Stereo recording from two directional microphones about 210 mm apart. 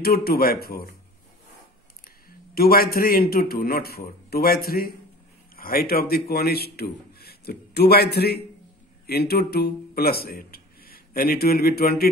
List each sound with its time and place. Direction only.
0.0 s a man's voice: 45° left (ahead or behind)
2.2 s a man's voice: 45° left (ahead or behind)